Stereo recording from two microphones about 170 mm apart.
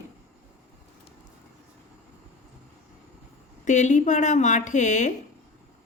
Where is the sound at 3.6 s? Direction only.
45° left (ahead or behind).